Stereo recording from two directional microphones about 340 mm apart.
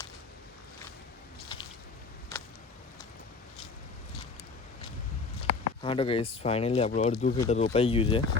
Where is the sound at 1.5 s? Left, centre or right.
Centre.